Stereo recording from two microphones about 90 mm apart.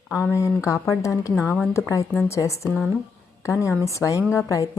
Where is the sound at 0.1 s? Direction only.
30° left (ahead or behind).